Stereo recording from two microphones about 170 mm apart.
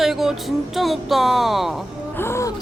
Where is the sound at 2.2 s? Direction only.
15° left (ahead or behind).